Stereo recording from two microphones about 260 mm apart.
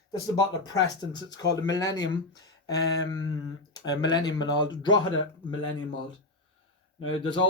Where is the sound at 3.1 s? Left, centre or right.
Centre.